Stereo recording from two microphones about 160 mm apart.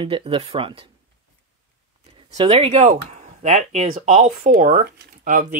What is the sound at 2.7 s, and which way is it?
Speech, 45° right (ahead or behind).